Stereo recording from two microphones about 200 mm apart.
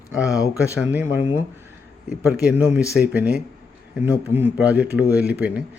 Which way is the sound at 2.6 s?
10° right (ahead or behind).